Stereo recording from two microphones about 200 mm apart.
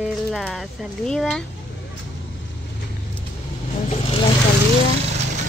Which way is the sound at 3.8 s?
30° left (ahead or behind).